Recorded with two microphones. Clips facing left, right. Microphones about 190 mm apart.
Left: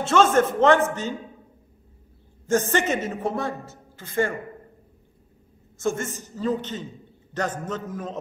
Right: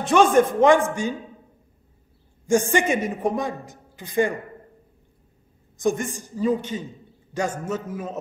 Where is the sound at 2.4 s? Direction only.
10° right (ahead or behind).